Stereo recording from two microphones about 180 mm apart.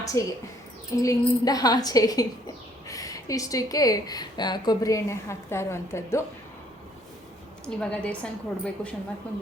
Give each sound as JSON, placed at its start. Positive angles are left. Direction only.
{"t": 0.0, "sound": "speech", "side_deg": 20}
{"t": 7.8, "sound": "a woman's voice", "side_deg": 5}